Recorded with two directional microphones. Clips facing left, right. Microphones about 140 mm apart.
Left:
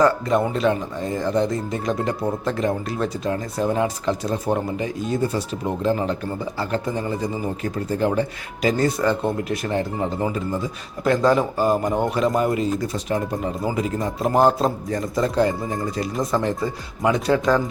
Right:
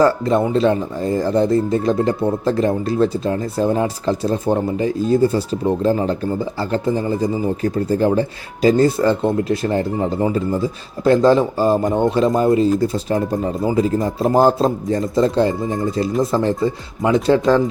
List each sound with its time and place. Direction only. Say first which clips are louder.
0.0 s speech: right 3 dB; 30° right (ahead or behind)